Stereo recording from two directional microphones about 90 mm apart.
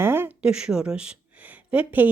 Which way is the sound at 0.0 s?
25° right (ahead or behind).